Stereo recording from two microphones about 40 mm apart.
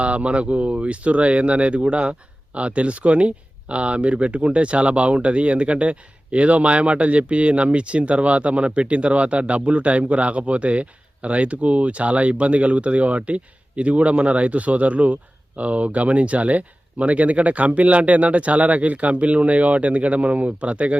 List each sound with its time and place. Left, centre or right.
0.0 s speech: right